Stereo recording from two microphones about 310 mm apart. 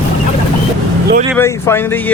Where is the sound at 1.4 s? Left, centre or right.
Centre.